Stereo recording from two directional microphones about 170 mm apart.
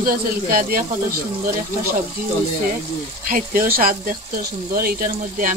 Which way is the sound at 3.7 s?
55° right (ahead or behind).